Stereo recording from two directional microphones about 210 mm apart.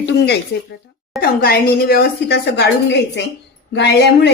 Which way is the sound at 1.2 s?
45° left (ahead or behind).